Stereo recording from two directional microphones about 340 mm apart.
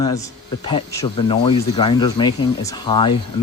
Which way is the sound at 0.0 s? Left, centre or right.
Centre.